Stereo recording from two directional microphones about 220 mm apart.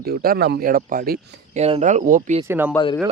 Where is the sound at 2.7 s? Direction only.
20° left (ahead or behind).